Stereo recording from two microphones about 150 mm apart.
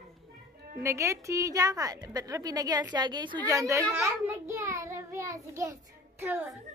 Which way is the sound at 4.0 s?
15° right (ahead or behind).